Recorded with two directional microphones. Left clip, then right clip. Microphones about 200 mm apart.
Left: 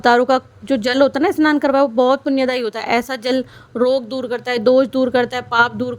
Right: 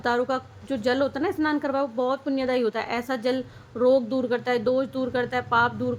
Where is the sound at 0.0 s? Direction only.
45° left (ahead or behind).